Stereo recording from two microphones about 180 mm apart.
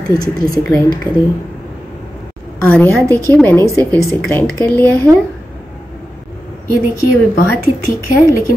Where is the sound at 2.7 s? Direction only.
10° left (ahead or behind).